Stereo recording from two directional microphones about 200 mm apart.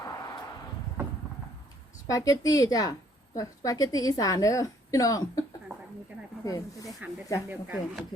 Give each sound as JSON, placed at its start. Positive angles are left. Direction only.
{"t": 0.0, "sound": "a sound", "side_deg": 20}
{"t": 2.0, "sound": "a woman's voice", "side_deg": 15}
{"t": 6.4, "sound": "a woman's voice", "side_deg": 15}
{"t": 7.5, "sound": "speech", "side_deg": -5}